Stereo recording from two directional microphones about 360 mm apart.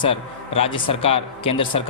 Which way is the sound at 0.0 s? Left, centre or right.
Centre.